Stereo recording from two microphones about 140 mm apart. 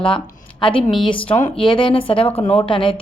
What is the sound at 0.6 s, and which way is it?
A woman's voice, 35° left (ahead or behind).